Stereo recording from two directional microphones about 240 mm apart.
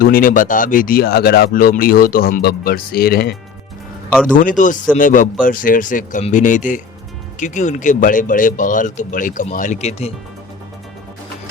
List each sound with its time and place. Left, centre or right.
0.0 s speech: left